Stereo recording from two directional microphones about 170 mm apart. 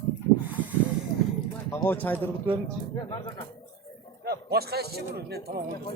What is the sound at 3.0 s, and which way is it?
Speech, 30° left (ahead or behind).